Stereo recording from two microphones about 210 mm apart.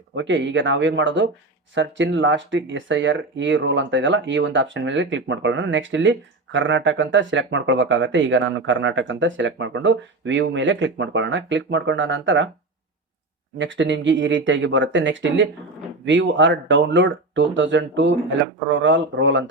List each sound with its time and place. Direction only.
0.1 s speech: 60° right (ahead or behind)
13.6 s speech: 60° right (ahead or behind)